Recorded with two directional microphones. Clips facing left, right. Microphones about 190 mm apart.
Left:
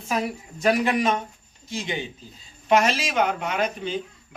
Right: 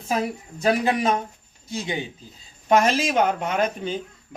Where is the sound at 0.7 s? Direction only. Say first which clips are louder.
Even; 30° right (ahead or behind).